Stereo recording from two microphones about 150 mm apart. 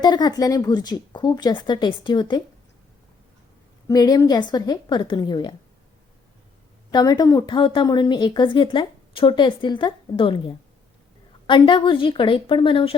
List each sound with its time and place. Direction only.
0.0 s speech: 30° left (ahead or behind)
3.8 s speech: 25° left (ahead or behind)
6.9 s speech: 25° left (ahead or behind)